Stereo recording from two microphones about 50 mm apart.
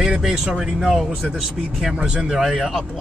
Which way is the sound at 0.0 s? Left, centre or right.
Centre.